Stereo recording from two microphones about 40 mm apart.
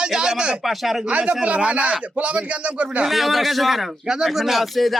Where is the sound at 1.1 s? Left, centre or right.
Right.